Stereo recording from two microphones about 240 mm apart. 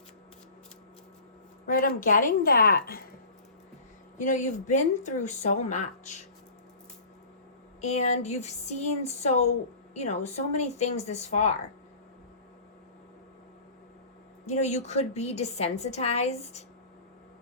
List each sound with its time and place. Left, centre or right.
1.6 s a woman's voice: left
4.2 s a woman's voice: left
7.8 s a woman's voice: left
14.4 s a woman's voice: left